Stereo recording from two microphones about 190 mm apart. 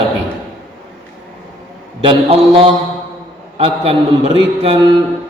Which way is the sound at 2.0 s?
30° right (ahead or behind).